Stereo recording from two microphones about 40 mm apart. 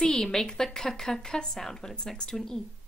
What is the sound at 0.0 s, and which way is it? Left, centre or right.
A woman's voice, centre.